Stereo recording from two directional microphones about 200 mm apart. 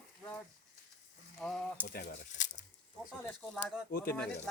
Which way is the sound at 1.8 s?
45° left (ahead or behind).